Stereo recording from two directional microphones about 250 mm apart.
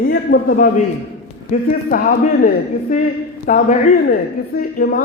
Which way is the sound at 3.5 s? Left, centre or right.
Left.